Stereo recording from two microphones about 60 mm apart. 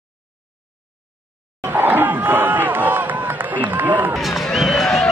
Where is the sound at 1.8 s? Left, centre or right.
Right.